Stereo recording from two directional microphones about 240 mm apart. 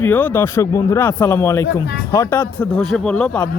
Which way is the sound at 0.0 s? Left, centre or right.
Centre.